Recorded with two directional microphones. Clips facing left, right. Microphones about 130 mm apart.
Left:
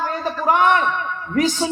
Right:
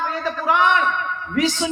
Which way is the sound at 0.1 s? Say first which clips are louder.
Left 2 dB; 45° left (ahead or behind).